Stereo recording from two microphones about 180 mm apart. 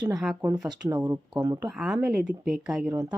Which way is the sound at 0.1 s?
5° right (ahead or behind).